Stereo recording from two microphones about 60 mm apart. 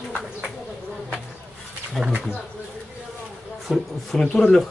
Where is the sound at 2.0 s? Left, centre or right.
Centre.